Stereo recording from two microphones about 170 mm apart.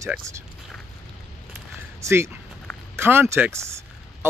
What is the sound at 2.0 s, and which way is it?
Speech, 15° right (ahead or behind).